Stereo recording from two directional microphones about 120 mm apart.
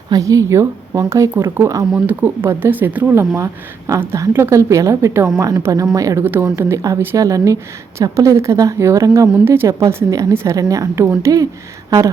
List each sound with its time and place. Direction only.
0.1 s a woman's voice: 25° right (ahead or behind)